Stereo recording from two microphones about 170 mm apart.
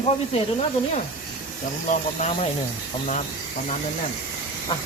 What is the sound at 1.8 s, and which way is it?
Speech, 45° left (ahead or behind).